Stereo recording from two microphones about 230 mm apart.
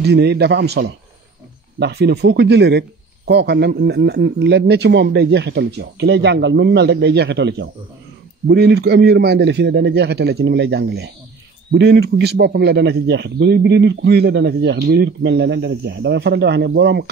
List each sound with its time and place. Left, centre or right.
0.0 s speech: right